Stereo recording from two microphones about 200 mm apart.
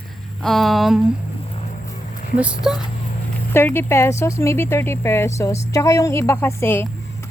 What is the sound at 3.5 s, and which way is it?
Speech, 10° left (ahead or behind).